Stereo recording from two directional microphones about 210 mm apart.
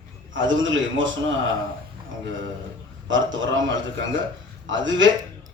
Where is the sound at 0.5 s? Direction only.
65° right (ahead or behind).